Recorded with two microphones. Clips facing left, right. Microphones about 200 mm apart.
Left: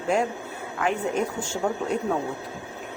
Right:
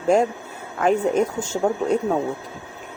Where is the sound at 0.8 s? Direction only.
40° right (ahead or behind).